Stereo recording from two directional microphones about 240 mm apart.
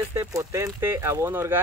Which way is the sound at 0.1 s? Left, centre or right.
Centre.